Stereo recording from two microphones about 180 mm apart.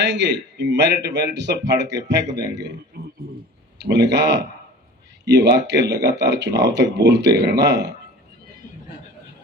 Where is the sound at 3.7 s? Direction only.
70° right (ahead or behind).